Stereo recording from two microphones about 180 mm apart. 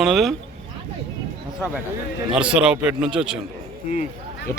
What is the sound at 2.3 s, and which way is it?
A man's voice, 5° right (ahead or behind).